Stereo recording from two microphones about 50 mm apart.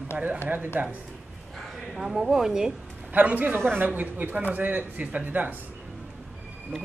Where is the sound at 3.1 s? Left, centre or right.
Right.